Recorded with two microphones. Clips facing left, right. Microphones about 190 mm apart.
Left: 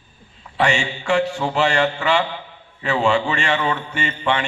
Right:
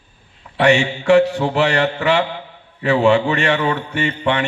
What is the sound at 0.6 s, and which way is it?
A man's voice, 60° right (ahead or behind).